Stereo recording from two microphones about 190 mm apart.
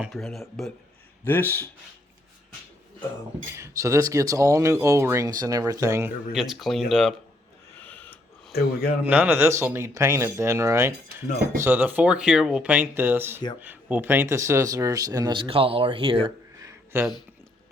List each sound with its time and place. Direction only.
0.0 s speech: centre (ahead or behind)
3.5 s speech: 15° right (ahead or behind)
6.3 s speech: centre (ahead or behind)
8.5 s speech: 55° left (ahead or behind)
9.0 s speech: 10° right (ahead or behind)